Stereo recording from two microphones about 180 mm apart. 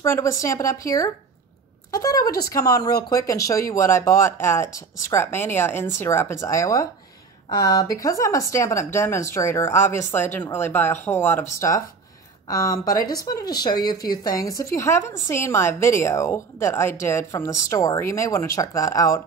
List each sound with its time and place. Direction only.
0.0 s speech: 15° left (ahead or behind)
12.4 s speech: 20° left (ahead or behind)